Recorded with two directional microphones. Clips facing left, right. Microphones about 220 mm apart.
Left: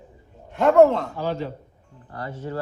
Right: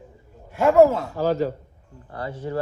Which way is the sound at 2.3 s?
15° right (ahead or behind).